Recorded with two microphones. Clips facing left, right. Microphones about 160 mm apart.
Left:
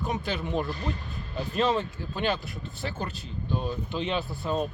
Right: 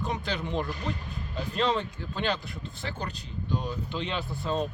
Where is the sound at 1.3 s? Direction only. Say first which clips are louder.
Left 2 dB; 20° left (ahead or behind).